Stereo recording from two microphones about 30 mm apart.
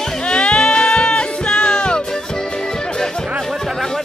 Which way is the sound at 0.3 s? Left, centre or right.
Left.